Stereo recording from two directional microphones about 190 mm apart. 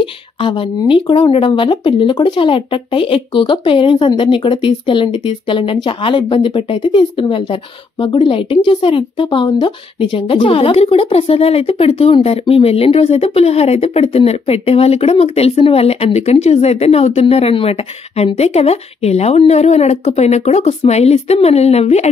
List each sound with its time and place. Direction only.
0.0 s speech: 25° left (ahead or behind)